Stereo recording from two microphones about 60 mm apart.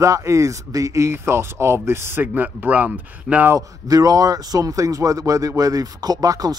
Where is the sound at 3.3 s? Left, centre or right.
Centre.